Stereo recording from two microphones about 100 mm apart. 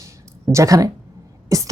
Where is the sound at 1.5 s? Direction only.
35° right (ahead or behind).